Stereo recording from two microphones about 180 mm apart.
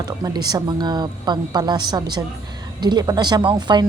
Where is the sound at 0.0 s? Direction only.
20° right (ahead or behind).